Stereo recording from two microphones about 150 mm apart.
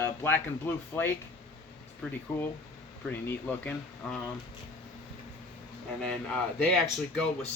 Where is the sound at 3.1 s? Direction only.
10° left (ahead or behind).